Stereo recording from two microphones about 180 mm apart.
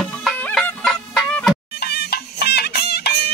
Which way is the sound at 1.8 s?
60° left (ahead or behind).